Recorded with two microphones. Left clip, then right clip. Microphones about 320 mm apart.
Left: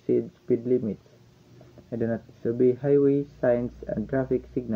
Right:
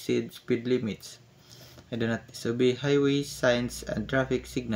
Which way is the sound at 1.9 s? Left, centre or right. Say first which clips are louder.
Left 2 dB; right.